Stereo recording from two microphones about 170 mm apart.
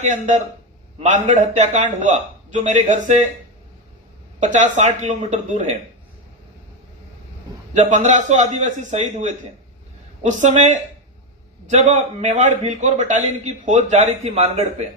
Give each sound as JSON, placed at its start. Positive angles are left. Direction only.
{"t": 0.0, "sound": "a man's voice", "side_deg": -45}
{"t": 4.4, "sound": "a man's voice", "side_deg": -45}
{"t": 7.7, "sound": "a man's voice", "side_deg": -45}